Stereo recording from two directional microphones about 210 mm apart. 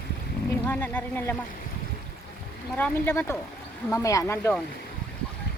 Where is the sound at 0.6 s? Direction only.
10° left (ahead or behind).